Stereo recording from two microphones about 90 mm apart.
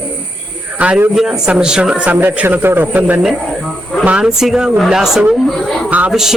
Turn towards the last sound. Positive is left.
turn(degrees=-5)  # may be behind; listen again after turning